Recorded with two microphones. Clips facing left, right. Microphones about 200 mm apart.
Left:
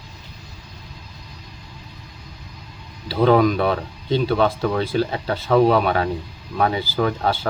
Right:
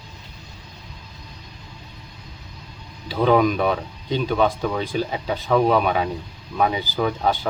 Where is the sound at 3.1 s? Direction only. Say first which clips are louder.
Left 2 dB; 5° right (ahead or behind).